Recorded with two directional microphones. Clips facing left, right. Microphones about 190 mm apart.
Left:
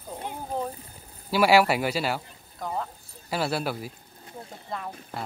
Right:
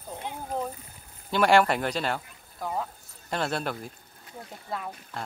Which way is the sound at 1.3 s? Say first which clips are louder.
Left 1 dB; 5° left (ahead or behind).